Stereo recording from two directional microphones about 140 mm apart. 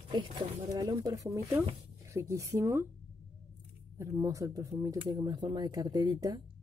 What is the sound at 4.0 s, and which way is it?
Speech, 20° right (ahead or behind).